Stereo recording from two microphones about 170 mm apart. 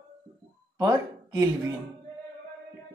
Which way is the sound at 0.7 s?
20° right (ahead or behind).